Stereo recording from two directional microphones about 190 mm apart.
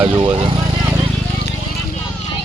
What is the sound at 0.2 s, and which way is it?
Speech, 30° right (ahead or behind).